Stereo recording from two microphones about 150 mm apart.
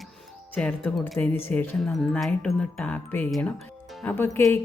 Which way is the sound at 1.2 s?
15° left (ahead or behind).